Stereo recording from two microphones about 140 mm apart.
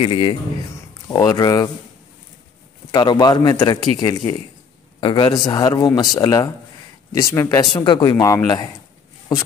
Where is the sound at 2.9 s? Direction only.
30° left (ahead or behind).